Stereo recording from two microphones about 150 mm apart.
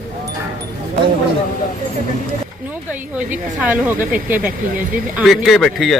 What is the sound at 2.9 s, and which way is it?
A woman's voice, 10° right (ahead or behind).